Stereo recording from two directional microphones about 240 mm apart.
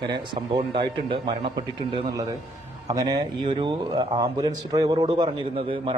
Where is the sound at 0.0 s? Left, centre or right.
Centre.